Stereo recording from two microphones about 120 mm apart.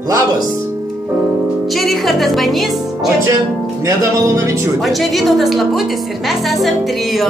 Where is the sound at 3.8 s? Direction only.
25° right (ahead or behind).